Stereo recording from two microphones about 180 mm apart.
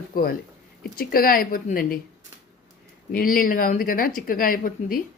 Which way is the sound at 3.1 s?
55° left (ahead or behind).